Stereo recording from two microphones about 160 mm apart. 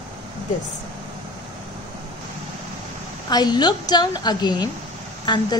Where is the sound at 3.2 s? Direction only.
25° left (ahead or behind).